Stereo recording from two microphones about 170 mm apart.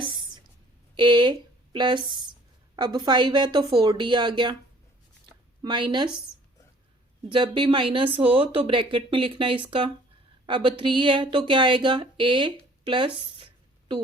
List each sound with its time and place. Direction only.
0.9 s a woman's voice: 25° right (ahead or behind)
5.6 s a woman's voice: 25° right (ahead or behind)
7.3 s speech: 30° right (ahead or behind)